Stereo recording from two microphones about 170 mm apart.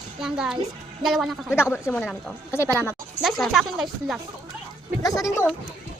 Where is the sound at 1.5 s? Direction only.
15° left (ahead or behind).